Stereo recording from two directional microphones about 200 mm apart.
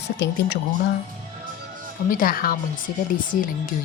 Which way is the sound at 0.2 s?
55° left (ahead or behind).